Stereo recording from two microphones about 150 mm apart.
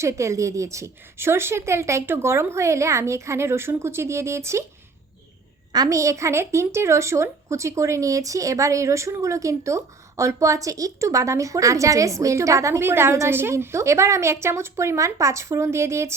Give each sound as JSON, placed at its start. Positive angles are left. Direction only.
{"t": 0.0, "sound": "a woman's voice", "side_deg": -20}
{"t": 5.7, "sound": "a woman's voice", "side_deg": -25}